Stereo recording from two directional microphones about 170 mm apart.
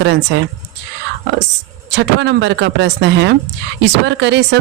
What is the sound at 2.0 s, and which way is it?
Speech, 90° right.